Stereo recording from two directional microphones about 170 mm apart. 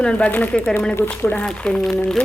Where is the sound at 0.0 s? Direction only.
5° left (ahead or behind).